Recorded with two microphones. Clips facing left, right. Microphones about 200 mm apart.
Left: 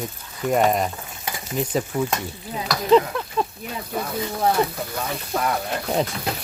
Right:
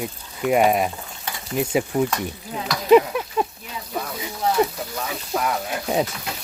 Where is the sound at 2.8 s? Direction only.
15° right (ahead or behind).